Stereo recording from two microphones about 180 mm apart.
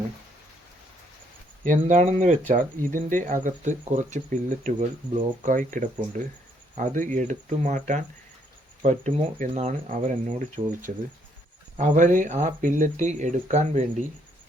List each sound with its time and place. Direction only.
1.6 s speech: 45° right (ahead or behind)